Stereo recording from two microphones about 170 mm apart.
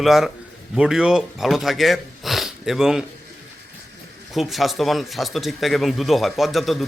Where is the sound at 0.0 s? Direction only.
Centre (ahead or behind).